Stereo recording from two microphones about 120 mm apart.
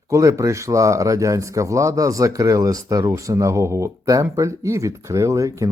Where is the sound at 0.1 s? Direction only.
25° right (ahead or behind).